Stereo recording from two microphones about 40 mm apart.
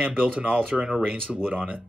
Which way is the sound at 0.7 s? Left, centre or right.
Centre.